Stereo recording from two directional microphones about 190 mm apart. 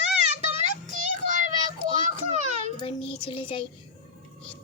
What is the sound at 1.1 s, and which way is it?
Child singing, 40° right (ahead or behind).